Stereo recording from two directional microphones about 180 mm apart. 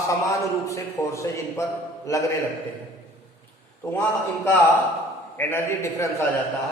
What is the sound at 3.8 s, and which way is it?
Speech, 15° left (ahead or behind).